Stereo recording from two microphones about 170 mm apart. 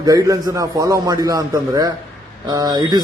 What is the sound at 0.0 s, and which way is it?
Speech, 20° right (ahead or behind).